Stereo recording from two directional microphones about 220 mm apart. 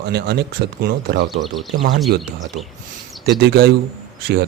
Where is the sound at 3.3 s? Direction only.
45° right (ahead or behind).